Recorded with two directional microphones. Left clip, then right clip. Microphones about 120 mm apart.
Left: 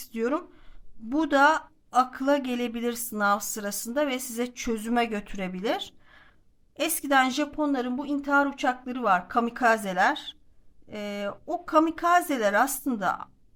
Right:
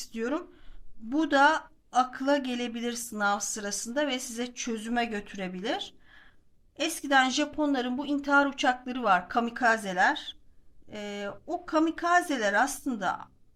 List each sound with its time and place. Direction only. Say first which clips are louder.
0.0 s a woman's voice: left 4 dB; 35° left (ahead or behind); by 9.5 s 20° left (ahead or behind)
9.5 s speech: left 3 dB; 30° left (ahead or behind)